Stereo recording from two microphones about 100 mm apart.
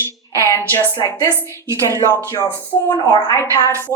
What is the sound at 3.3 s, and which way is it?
Speech, 30° left (ahead or behind).